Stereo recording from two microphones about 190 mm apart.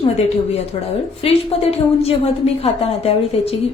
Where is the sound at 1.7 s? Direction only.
30° left (ahead or behind).